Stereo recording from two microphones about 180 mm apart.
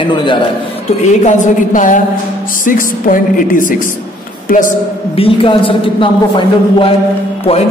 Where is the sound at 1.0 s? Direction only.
45° left (ahead or behind).